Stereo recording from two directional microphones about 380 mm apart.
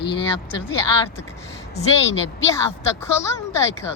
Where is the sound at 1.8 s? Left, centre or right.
Centre.